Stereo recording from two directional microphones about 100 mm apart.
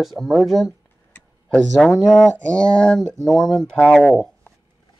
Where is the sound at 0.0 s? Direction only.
Centre (ahead or behind).